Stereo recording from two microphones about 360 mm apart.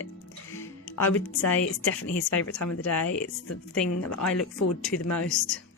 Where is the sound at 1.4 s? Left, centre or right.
Left.